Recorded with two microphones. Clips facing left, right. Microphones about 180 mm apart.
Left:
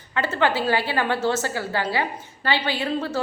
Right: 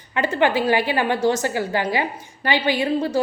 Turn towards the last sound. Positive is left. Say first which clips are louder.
# right 5 dB
turn(degrees=-15)  # may be behind; listen again after turning